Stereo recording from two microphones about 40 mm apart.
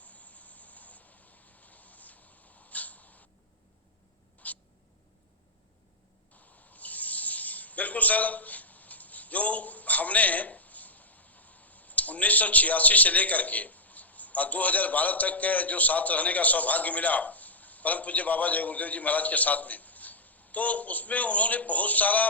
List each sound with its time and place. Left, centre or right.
0.0 s a sound: left
4.4 s cat: left
6.7 s speech: left